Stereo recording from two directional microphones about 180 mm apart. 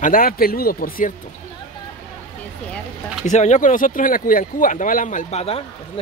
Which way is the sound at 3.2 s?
40° left (ahead or behind).